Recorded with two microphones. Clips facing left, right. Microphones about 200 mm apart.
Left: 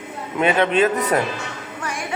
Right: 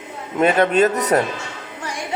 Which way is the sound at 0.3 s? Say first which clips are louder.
Right 2 dB; 40° right (ahead or behind).